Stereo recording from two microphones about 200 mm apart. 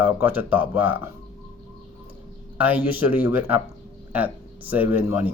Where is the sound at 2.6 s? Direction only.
10° right (ahead or behind).